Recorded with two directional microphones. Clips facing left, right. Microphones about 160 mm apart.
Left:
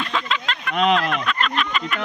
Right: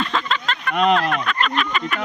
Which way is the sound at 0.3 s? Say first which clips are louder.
Right 2 dB; centre (ahead or behind).